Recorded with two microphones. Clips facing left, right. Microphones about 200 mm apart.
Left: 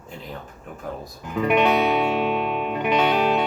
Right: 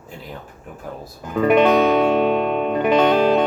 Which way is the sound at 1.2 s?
40° right (ahead or behind).